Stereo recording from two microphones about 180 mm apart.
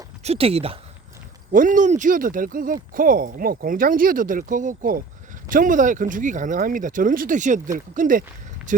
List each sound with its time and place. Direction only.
0.2 s speech: 35° right (ahead or behind)
1.5 s speech: 45° right (ahead or behind)